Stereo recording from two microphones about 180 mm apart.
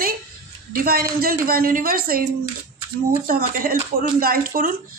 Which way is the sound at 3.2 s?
50° right (ahead or behind).